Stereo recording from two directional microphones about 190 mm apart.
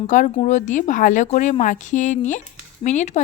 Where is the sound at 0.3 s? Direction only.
40° left (ahead or behind).